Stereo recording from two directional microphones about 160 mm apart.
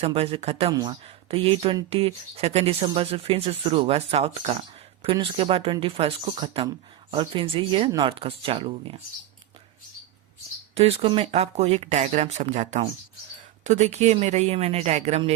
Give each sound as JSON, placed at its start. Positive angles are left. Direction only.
{"t": 0.0, "sound": "speech", "side_deg": -35}
{"t": 0.7, "sound": "speech", "side_deg": -25}
{"t": 10.8, "sound": "a woman's voice", "side_deg": -40}